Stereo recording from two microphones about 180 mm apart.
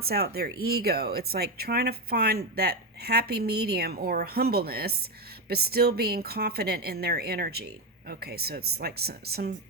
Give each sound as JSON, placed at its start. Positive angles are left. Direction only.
{"t": 0.0, "sound": "speech", "side_deg": -60}